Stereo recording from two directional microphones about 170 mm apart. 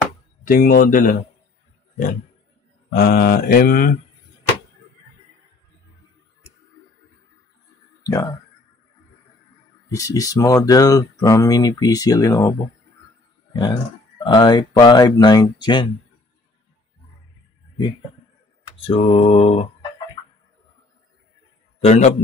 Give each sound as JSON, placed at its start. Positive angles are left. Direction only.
{"t": 0.5, "sound": "mantra", "side_deg": 55}
{"t": 2.9, "sound": "mantra", "side_deg": 65}
{"t": 8.0, "sound": "a sound", "side_deg": 20}
{"t": 9.8, "sound": "speech", "side_deg": 20}
{"t": 18.9, "sound": "mantra", "side_deg": 35}
{"t": 21.8, "sound": "mantra", "side_deg": 40}